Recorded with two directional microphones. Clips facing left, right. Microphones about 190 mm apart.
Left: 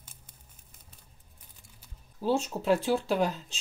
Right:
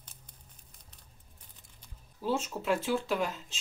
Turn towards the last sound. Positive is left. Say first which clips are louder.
# left 4 dB
turn(degrees=35)  # may be behind; listen again after turning